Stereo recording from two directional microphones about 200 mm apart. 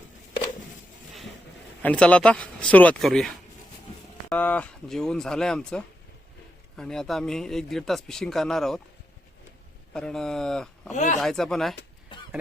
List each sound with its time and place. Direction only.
1.8 s speech: 5° left (ahead or behind)
9.9 s speech: 5° left (ahead or behind)
10.9 s speech: 35° left (ahead or behind)
11.2 s speech: centre (ahead or behind)
12.1 s a sound: 25° left (ahead or behind)